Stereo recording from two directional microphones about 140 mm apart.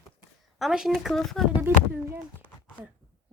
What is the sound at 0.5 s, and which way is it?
Speech, 5° right (ahead or behind).